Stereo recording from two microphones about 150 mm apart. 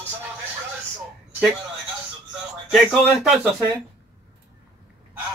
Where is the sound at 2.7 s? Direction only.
Centre (ahead or behind).